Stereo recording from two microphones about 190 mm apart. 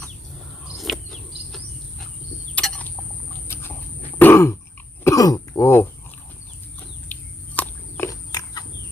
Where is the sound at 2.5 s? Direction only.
5° left (ahead or behind).